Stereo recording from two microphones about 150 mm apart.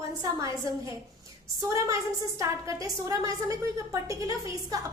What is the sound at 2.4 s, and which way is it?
A woman's voice, 20° right (ahead or behind).